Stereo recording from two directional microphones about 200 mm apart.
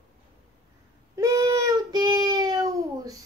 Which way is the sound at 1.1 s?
15° right (ahead or behind).